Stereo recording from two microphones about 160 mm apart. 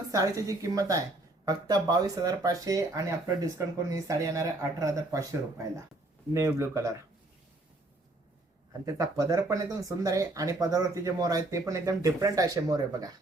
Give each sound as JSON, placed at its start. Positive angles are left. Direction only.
{"t": 0.1, "sound": "speech", "side_deg": -20}
{"t": 8.8, "sound": "speech", "side_deg": -20}